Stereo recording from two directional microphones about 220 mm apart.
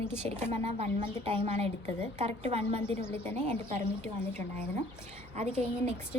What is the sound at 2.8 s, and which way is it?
Speech, 10° left (ahead or behind).